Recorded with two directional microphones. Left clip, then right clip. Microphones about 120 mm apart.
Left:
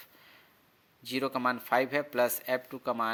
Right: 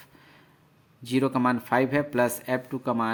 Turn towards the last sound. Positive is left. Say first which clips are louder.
# right 4 dB
turn(degrees=35)  # may be behind; listen again after turning